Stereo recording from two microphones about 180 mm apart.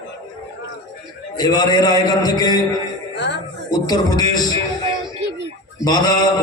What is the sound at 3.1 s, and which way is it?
Music, 75° left (ahead or behind).